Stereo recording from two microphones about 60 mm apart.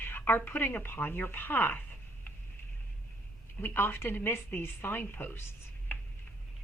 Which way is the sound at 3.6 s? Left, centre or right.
Left.